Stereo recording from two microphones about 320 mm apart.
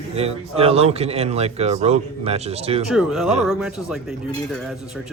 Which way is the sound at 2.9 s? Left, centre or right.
Centre.